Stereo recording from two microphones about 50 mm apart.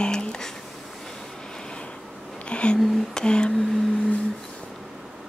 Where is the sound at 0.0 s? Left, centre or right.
Centre.